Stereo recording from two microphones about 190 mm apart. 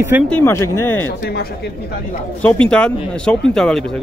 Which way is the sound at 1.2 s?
55° left (ahead or behind).